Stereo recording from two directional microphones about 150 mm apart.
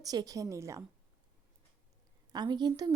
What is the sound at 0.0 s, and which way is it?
Speech, 25° right (ahead or behind).